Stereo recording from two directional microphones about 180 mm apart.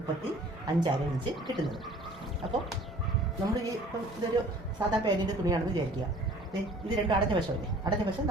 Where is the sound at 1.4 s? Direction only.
Centre (ahead or behind).